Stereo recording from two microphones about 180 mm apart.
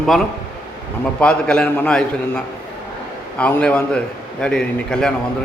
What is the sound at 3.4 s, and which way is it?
A man's voice, 5° left (ahead or behind).